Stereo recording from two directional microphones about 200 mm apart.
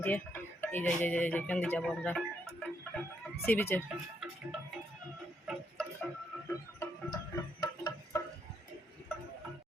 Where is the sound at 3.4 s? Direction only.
10° left (ahead or behind).